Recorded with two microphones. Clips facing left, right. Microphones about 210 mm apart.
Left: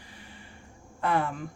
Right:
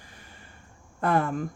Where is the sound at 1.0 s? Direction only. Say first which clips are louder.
Right 3 dB; 45° right (ahead or behind).